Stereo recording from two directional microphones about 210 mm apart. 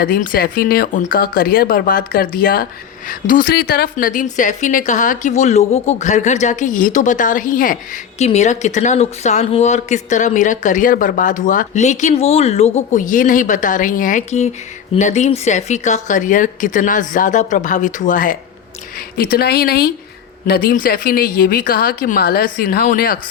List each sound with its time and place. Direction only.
0.0 s speech: 45° left (ahead or behind)